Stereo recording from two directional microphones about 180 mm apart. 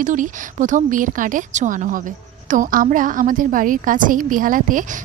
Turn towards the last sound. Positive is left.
turn(degrees=-50)  # may be behind; listen again after turning